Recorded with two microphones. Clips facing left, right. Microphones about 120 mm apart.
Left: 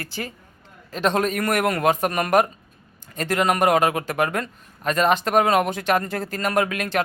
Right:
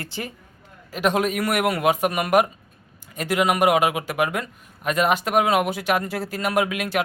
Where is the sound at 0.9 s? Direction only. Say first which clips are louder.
Even; 10° right (ahead or behind).